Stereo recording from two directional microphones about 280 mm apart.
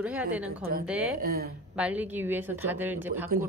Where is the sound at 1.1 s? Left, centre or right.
Right.